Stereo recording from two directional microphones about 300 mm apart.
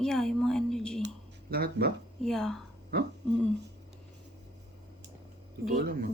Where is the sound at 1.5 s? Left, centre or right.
Right.